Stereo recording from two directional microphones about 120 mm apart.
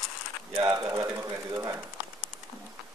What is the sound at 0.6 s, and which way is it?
Speech, 30° right (ahead or behind).